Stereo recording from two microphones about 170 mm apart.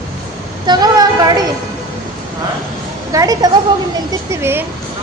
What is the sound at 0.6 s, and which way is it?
Speech, 25° right (ahead or behind).